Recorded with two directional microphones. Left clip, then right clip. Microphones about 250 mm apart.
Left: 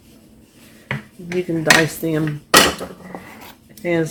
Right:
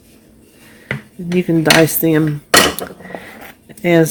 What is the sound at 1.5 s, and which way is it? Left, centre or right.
Speech, right.